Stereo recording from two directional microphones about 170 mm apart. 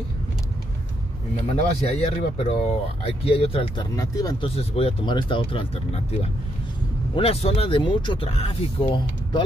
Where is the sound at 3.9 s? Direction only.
20° left (ahead or behind).